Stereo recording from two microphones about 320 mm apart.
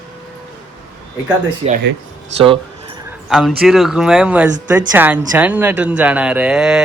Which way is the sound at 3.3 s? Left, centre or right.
Centre.